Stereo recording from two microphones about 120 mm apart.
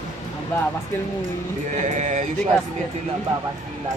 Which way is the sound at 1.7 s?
90° right.